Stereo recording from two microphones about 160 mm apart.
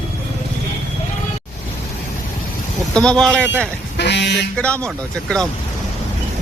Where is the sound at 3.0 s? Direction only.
5° left (ahead or behind).